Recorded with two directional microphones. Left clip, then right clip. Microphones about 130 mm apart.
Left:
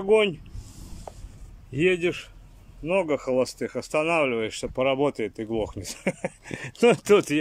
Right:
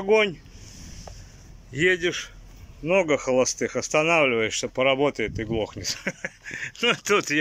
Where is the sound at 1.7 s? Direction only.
15° left (ahead or behind); by 7.2 s 35° left (ahead or behind).